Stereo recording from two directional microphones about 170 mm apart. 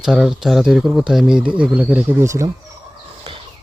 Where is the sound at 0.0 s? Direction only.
5° right (ahead or behind).